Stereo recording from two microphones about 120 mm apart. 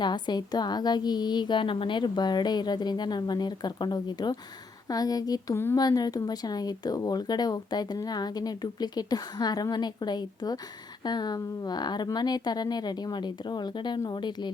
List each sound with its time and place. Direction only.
0.0 s speech: 35° left (ahead or behind)